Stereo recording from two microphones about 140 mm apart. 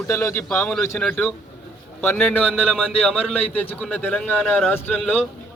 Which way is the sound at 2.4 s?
5° right (ahead or behind).